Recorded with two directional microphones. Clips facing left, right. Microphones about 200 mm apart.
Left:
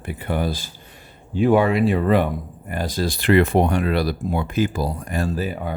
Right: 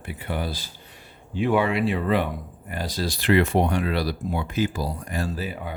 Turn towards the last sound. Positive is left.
turn(degrees=45)  # may be behind; listen again after turning